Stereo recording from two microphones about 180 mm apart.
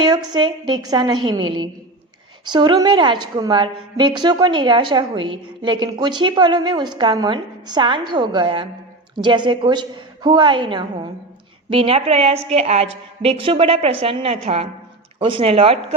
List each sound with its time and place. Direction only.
0.0 s a woman's voice: 25° right (ahead or behind)